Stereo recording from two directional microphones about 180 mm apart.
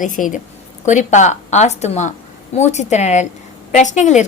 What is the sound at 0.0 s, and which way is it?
A woman's voice, 45° left (ahead or behind).